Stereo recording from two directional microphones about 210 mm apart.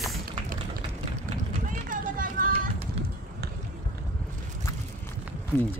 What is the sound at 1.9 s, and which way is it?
Vehicle, 40° right (ahead or behind).